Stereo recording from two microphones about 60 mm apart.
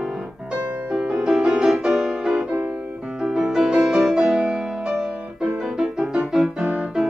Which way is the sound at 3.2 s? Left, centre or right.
Centre.